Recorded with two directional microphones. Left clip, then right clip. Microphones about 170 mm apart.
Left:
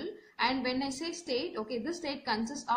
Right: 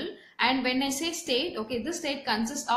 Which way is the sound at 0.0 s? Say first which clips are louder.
Right 4 dB; 20° left (ahead or behind).